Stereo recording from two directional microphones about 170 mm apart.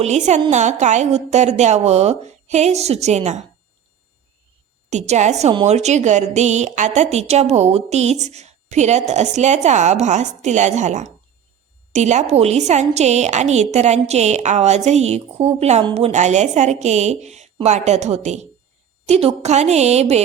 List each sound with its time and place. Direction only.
0.0 s a woman's voice: 45° right (ahead or behind)
4.9 s a woman's voice: 45° right (ahead or behind)